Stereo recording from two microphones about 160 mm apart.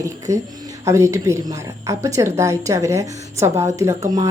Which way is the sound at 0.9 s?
20° right (ahead or behind).